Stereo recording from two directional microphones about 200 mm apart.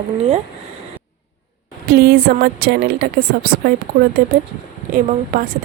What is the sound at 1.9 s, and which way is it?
A woman's voice, 50° right (ahead or behind).